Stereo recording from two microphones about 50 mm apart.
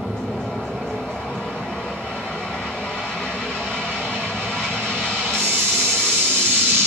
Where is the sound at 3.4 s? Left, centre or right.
Centre.